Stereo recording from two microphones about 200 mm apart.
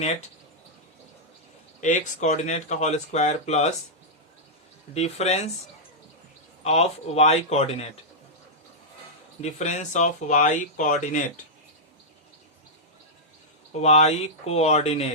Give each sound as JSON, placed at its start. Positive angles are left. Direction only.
{"t": 1.8, "sound": "speech", "side_deg": 35}
{"t": 4.9, "sound": "speech", "side_deg": 35}
{"t": 6.7, "sound": "speech", "side_deg": 30}
{"t": 9.4, "sound": "speech", "side_deg": 35}
{"t": 13.8, "sound": "speech", "side_deg": 30}